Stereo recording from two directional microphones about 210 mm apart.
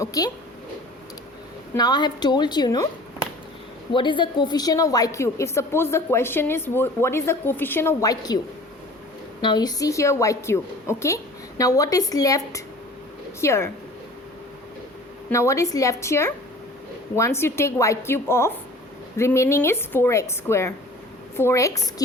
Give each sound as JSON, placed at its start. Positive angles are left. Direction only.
{"t": 0.0, "sound": "a woman's voice", "side_deg": 15}
{"t": 1.7, "sound": "a woman's voice", "side_deg": 20}
{"t": 3.9, "sound": "a woman's voice", "side_deg": 20}
{"t": 9.4, "sound": "a woman's voice", "side_deg": 20}
{"t": 13.4, "sound": "a woman's voice", "side_deg": 15}
{"t": 15.3, "sound": "a woman's voice", "side_deg": 15}